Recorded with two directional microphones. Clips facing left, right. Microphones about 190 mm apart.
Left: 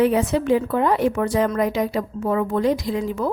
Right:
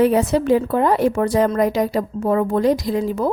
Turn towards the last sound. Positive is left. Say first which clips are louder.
# right 3 dB
turn(degrees=-35)  # may be behind; listen again after turning